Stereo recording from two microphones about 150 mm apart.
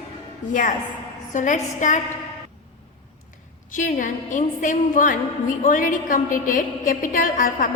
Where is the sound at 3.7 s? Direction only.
60° left (ahead or behind).